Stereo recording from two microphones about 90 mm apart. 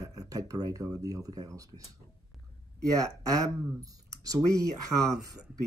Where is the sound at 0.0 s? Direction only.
40° right (ahead or behind).